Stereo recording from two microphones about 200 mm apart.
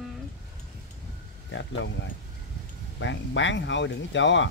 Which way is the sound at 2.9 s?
65° left (ahead or behind).